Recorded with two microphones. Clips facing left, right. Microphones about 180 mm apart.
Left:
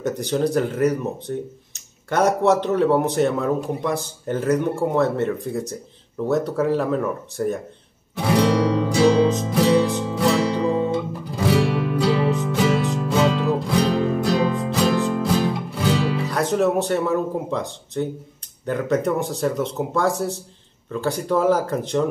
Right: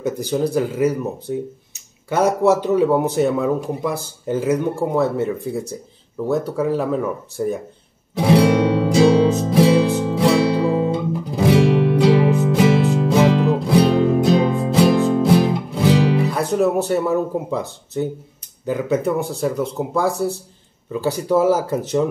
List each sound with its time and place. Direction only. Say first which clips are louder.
0.0 s a man's voice: right 1 dB; 5° right (ahead or behind)
8.4 s music: even; 10° right (ahead or behind)
16.3 s a man's voice: right 2 dB; 5° right (ahead or behind)